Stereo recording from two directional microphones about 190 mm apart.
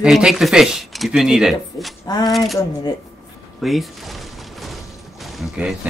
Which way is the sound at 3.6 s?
Centre (ahead or behind).